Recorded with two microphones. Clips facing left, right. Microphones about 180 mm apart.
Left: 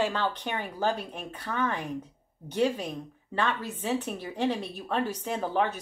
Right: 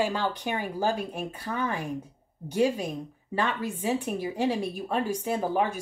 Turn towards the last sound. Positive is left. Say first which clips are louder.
# right 2 dB
turn(degrees=-10)  # may be behind; listen again after turning